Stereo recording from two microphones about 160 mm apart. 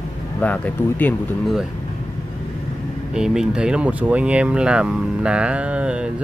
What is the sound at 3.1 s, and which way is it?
Speech, 5° right (ahead or behind).